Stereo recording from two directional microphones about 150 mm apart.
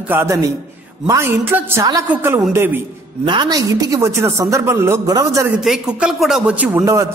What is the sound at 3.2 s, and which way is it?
A woman's voice, 30° right (ahead or behind).